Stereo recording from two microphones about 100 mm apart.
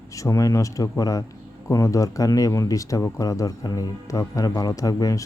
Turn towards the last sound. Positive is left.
turn(degrees=35)  # may be behind; listen again after turning